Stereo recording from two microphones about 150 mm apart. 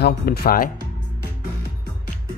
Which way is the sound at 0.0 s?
90° left.